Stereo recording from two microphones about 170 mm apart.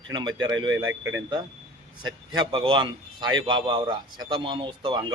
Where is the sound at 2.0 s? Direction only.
25° right (ahead or behind).